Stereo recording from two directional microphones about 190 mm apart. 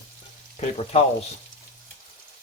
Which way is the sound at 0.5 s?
35° left (ahead or behind).